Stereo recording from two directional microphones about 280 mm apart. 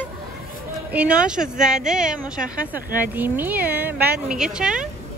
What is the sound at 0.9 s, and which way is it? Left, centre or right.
Speech, centre.